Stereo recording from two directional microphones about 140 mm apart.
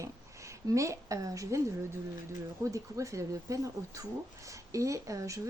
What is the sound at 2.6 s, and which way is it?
Speech, 20° right (ahead or behind).